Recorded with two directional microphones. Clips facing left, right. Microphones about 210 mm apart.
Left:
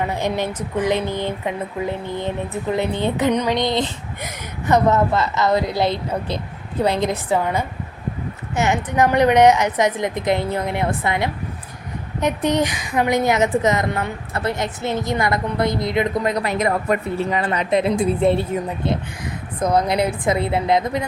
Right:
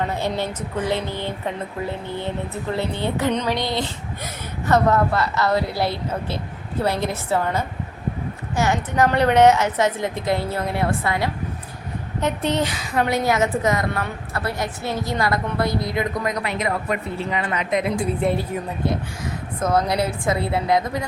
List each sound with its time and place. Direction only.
0.0 s a woman's voice: 15° left (ahead or behind)